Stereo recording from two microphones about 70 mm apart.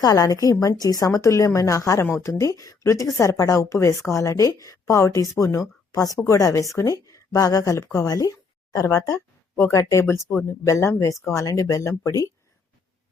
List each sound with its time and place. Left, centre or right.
0.0 s a woman's voice: left
2.5 s a woman's voice: left